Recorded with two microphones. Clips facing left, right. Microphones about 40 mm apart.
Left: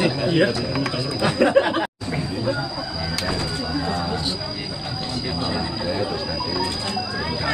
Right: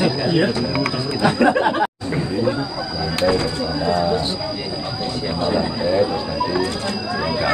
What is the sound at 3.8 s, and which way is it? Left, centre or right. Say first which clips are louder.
Speech: right 7 dB; right.